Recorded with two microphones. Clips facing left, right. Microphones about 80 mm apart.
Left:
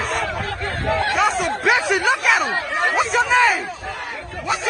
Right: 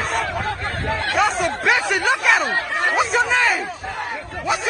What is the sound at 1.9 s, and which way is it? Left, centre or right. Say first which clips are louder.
Speech: even; centre.